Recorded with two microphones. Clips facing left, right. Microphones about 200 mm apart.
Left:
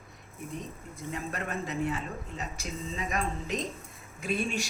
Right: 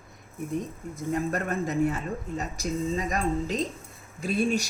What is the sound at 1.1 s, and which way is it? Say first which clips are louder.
Speech: right 7 dB; 45° right (ahead or behind).